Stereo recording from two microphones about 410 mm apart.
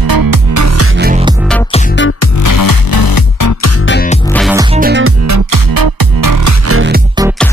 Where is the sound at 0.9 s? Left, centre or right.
Right.